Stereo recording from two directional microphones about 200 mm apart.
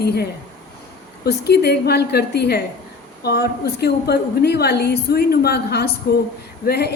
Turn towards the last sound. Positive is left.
turn(degrees=55)  # may be behind; listen again after turning